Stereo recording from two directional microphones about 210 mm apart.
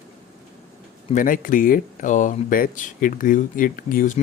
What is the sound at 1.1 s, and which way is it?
Speech, 40° left (ahead or behind).